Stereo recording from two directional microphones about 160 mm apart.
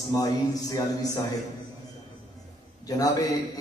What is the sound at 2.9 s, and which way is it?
Speech, 25° left (ahead or behind).